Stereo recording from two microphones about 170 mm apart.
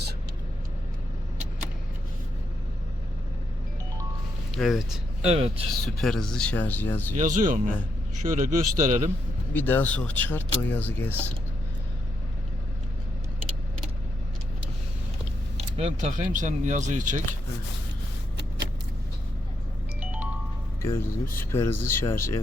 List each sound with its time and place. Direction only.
4.5 s speech: centre (ahead or behind)
5.2 s speech: 35° right (ahead or behind)
5.8 s speech: 5° left (ahead or behind)
7.2 s speech: 50° right (ahead or behind)
9.5 s speech: 10° left (ahead or behind)
15.5 s speech: 40° right (ahead or behind)
20.0 s music: 10° right (ahead or behind)
20.8 s speech: 15° left (ahead or behind)